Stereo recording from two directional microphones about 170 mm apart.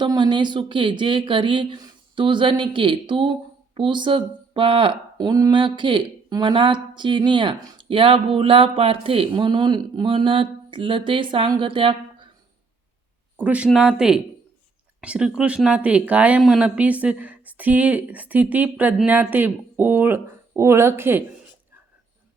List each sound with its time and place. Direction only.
0.0 s speech: 25° right (ahead or behind)
13.3 s speech: 10° right (ahead or behind)